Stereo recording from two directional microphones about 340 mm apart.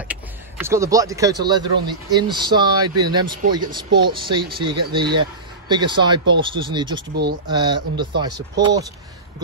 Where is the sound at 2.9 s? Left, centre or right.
Right.